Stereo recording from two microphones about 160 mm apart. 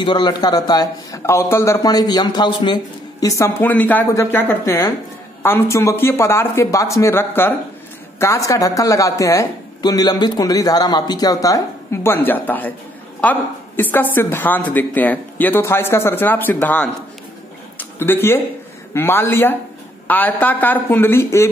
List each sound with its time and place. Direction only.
0.0 s a woman's voice: 30° left (ahead or behind)